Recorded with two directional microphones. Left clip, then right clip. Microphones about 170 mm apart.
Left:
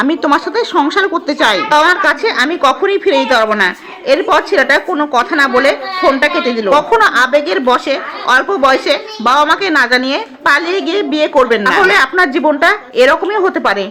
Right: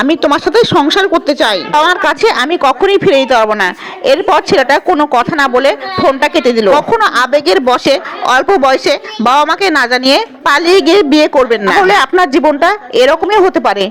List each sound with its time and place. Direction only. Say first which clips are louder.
0.0 s a woman's voice: right 2 dB; 35° right (ahead or behind)